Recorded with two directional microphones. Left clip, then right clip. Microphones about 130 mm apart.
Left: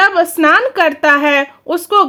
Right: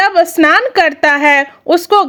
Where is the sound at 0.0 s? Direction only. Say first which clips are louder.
Right 1 dB; 20° right (ahead or behind).